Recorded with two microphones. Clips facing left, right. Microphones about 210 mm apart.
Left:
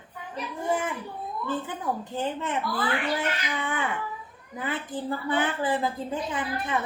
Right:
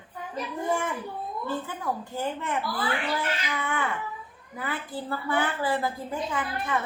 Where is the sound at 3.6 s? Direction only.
20° left (ahead or behind).